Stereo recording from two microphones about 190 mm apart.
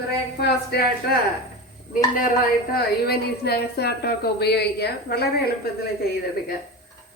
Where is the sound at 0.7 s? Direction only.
60° left (ahead or behind).